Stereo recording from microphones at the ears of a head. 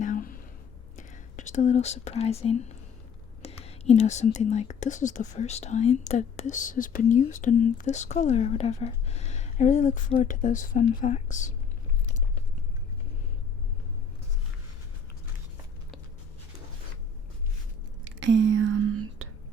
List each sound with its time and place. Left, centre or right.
0.0 s a sound: left
0.9 s speech: left
18.0 s whispering: right